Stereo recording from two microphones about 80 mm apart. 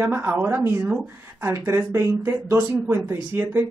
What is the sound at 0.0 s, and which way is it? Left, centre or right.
Speech, right.